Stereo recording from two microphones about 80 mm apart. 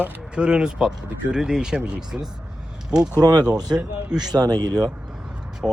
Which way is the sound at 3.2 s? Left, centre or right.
Right.